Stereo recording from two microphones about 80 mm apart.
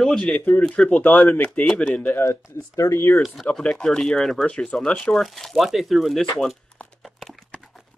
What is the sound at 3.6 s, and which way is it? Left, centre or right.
Speech, centre.